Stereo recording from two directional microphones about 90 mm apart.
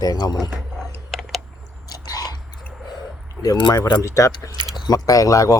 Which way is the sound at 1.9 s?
45° left (ahead or behind).